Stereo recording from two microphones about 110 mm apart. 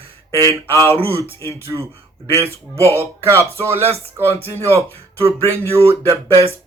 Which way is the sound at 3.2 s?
25° right (ahead or behind).